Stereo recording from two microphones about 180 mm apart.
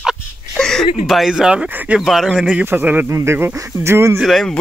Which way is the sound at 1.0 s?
Centre (ahead or behind).